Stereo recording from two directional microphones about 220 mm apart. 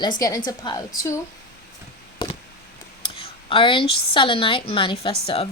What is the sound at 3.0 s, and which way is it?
A woman's voice, 25° left (ahead or behind).